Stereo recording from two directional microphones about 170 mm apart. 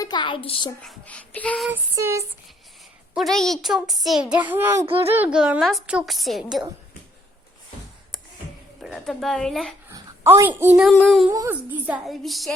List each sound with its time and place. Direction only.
0.0 s a woman's voice: 25° left (ahead or behind)
0.8 s child singing: 5° left (ahead or behind)
1.7 s speech: 15° right (ahead or behind)
3.2 s a child's voice: centre (ahead or behind); by 4.9 s 15° right (ahead or behind)
4.9 s speech: 35° right (ahead or behind)
5.1 s a child's voice: 5° right (ahead or behind)
8.8 s a child's voice: centre (ahead or behind)
9.9 s a woman's voice: 15° right (ahead or behind)
10.8 s a child's voice: 5° left (ahead or behind)
11.3 s speech: 15° right (ahead or behind)
12.0 s a child's voice: centre (ahead or behind)